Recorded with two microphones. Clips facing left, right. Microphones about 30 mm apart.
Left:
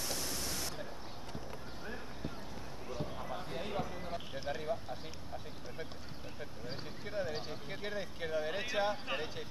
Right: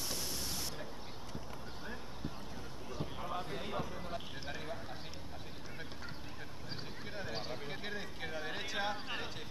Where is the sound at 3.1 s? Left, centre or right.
Centre.